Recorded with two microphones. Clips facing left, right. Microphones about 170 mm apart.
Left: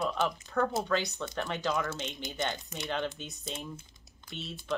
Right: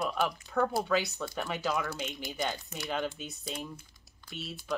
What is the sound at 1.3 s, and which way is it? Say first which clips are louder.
Speech: left 1 dB; 5° right (ahead or behind).